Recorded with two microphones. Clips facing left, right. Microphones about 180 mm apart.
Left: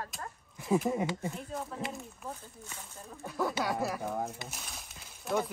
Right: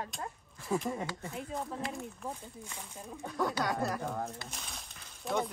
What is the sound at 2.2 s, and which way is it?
Speech, 10° right (ahead or behind).